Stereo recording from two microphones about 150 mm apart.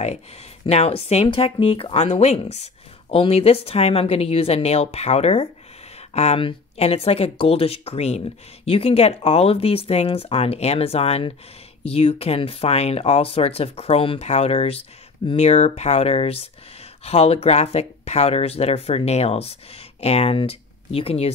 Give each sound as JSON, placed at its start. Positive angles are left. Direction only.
{"t": 0.7, "sound": "speech", "side_deg": 45}